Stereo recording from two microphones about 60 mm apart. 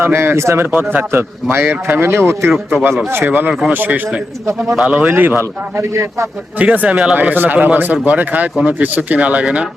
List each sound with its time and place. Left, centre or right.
0.0 s speech: right
0.7 s speech: right
4.8 s speech: right
5.0 s speech: right
6.6 s speech: right
7.2 s speech: right